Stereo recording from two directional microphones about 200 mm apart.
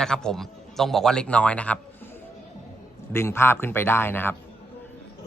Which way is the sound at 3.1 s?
15° left (ahead or behind).